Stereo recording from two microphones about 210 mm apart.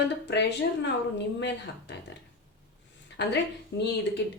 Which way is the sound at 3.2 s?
55° left (ahead or behind).